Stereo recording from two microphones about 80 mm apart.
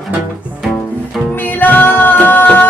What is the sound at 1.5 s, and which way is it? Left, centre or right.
Music, left.